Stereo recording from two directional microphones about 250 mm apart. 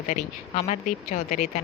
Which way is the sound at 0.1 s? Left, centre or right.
Left.